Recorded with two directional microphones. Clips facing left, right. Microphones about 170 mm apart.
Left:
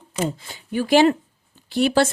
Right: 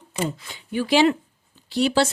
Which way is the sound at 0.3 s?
40° left (ahead or behind).